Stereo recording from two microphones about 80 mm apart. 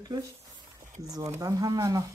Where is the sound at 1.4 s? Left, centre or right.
Right.